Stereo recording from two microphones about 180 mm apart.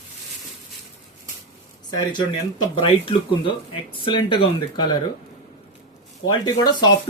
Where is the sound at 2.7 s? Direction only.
30° left (ahead or behind).